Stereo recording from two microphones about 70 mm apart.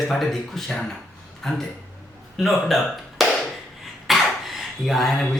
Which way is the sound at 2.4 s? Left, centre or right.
Centre.